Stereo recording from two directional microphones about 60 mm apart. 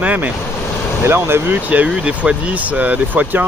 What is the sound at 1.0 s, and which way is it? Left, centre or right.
Speech, right.